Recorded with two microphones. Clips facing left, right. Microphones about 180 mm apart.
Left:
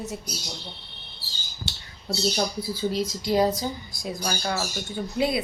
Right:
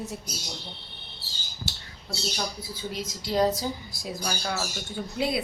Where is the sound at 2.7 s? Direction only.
35° left (ahead or behind).